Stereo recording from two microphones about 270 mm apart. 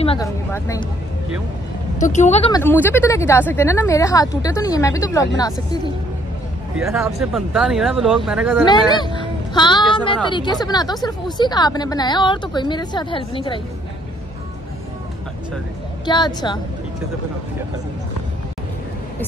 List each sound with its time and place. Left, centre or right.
0.0 s a sound: left
0.5 s a woman's voice: centre
2.0 s a woman's voice: left
2.6 s a woman's voice: centre
6.8 s speech: centre
8.6 s a woman's voice: centre
16.1 s a woman's voice: centre